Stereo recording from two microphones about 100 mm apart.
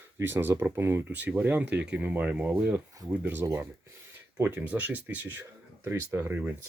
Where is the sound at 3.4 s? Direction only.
30° right (ahead or behind).